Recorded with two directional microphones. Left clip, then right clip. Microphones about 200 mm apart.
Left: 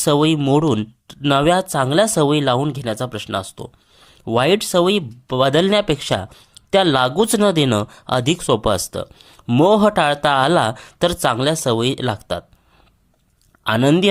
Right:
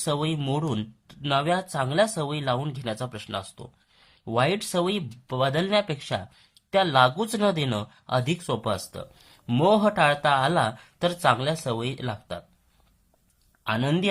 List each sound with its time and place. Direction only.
0.0 s speech: 40° left (ahead or behind)
13.7 s speech: 40° left (ahead or behind)